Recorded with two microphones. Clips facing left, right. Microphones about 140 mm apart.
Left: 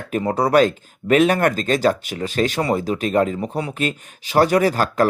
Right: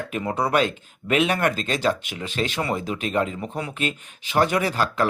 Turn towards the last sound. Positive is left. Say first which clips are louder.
# left 5 dB
turn(degrees=45)  # may be behind; listen again after turning